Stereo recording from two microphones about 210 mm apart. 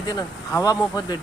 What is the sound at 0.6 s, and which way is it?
Speech, 15° left (ahead or behind).